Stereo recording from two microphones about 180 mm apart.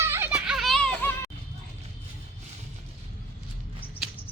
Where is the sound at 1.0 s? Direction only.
15° left (ahead or behind).